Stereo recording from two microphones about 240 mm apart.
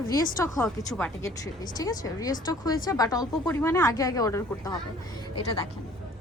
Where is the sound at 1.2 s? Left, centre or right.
Centre.